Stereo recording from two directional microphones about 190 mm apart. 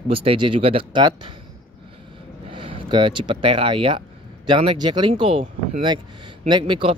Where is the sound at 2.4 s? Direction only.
30° right (ahead or behind).